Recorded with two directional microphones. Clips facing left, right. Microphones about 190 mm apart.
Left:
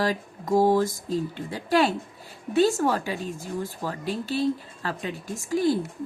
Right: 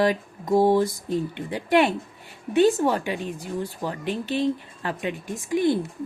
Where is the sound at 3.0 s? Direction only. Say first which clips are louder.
Right 2 dB; 40° left (ahead or behind).